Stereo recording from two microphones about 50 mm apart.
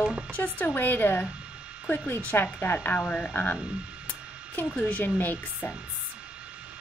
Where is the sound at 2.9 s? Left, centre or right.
Left.